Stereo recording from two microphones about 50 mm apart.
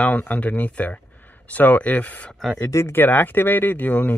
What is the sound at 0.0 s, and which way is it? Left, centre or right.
Speech, left.